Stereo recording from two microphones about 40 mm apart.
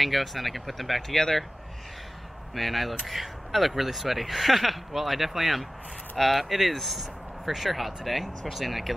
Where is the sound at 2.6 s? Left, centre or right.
Centre.